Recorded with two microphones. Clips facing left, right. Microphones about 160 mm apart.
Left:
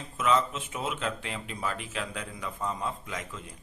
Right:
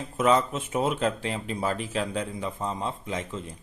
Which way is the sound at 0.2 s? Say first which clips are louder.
Right 4 dB; 40° right (ahead or behind).